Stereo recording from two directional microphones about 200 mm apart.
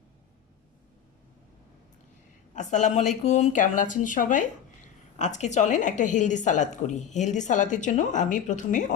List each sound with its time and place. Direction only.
2.6 s a woman's voice: 35° left (ahead or behind)